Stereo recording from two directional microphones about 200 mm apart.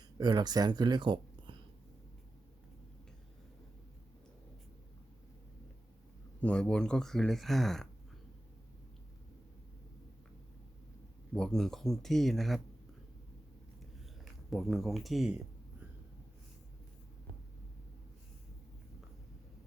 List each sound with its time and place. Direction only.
0.2 s speech: 20° right (ahead or behind)
6.4 s speech: 5° left (ahead or behind)
11.3 s speech: 5° left (ahead or behind)
14.5 s speech: centre (ahead or behind)